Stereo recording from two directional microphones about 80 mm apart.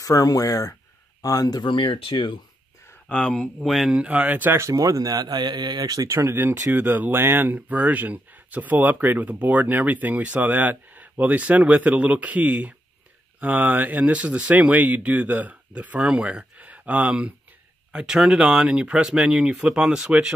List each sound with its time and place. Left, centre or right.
0.0 s speech: left
1.7 s speech: left
3.1 s speech: centre; by 4.6 s right
4.6 s a man's voice: right
6.0 s speech: right; by 16.3 s centre
16.5 s a sound: centre
17.9 s speech: centre